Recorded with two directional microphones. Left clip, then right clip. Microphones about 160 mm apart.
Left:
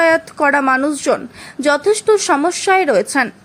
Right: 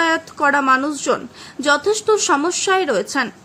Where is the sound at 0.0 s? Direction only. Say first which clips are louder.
Left 4 dB; 20° left (ahead or behind).